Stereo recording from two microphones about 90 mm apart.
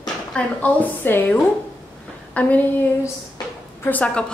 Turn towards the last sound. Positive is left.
turn(degrees=15)  # may be behind; listen again after turning